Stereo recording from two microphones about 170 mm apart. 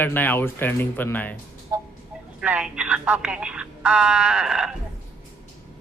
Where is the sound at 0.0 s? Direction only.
10° left (ahead or behind).